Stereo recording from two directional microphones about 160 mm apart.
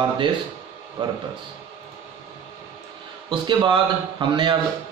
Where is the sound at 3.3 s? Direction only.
30° right (ahead or behind).